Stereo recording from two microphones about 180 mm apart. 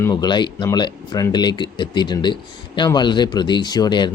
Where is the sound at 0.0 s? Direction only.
20° left (ahead or behind).